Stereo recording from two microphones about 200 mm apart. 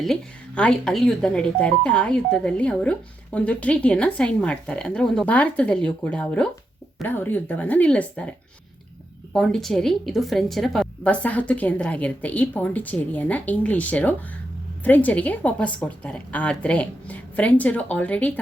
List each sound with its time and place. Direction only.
0.0 s a woman's voice: 5° left (ahead or behind)